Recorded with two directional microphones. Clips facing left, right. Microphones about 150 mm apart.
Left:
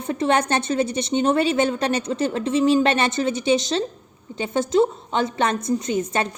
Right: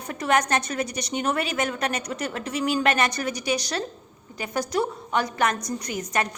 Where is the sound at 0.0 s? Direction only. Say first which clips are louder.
Left 3 dB; 25° left (ahead or behind).